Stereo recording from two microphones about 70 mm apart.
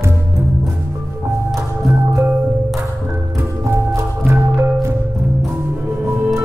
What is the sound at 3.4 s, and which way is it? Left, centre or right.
Music, right.